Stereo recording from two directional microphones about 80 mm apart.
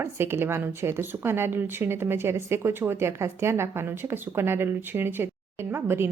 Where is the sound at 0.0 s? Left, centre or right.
Right.